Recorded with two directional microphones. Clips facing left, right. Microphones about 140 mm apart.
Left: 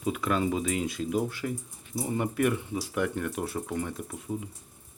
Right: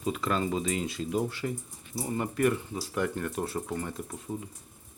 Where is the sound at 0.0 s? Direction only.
5° left (ahead or behind).